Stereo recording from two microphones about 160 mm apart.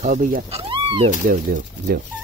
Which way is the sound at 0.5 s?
35° right (ahead or behind).